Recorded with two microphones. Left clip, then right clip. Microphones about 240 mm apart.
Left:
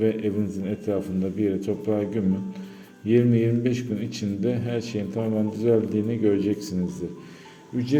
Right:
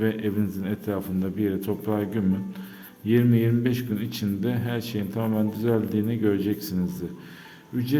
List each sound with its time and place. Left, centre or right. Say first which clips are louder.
0.0 s a man's voice: left 2 dB; centre